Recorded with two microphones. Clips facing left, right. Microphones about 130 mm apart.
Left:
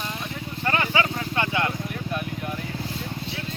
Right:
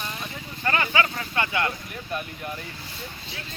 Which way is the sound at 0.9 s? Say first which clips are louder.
Left 1 dB; 25° left (ahead or behind).